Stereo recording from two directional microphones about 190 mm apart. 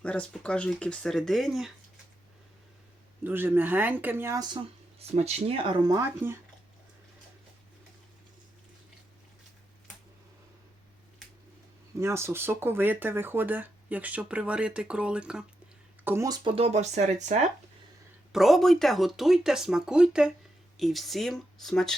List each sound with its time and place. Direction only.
0.0 s speech: 5° left (ahead or behind)
3.2 s speech: 10° right (ahead or behind)
11.9 s speech: 15° right (ahead or behind)
16.0 s speech: 15° right (ahead or behind); by 17.4 s 40° right (ahead or behind)
18.3 s speech: centre (ahead or behind)